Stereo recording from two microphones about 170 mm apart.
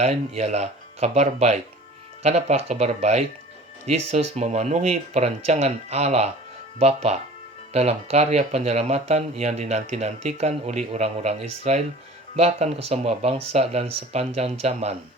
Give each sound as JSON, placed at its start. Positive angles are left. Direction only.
{"t": 0.0, "sound": "speech", "side_deg": -40}